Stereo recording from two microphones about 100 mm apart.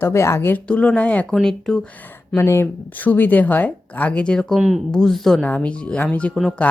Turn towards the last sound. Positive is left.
turn(degrees=10)  # may be behind; listen again after turning